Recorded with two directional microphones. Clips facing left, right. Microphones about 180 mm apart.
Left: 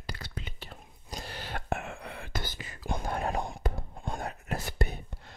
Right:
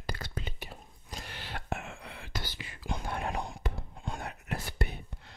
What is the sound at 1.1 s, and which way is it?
Whispering, 35° left (ahead or behind).